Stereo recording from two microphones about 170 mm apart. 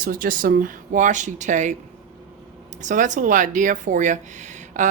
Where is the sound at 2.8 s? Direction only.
45° right (ahead or behind).